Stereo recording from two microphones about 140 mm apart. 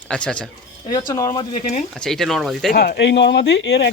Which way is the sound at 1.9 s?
5° left (ahead or behind).